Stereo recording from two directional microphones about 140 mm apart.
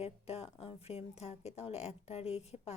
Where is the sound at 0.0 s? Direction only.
45° left (ahead or behind).